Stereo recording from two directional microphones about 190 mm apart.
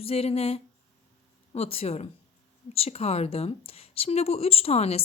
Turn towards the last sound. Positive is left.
turn(degrees=30)  # may be behind; listen again after turning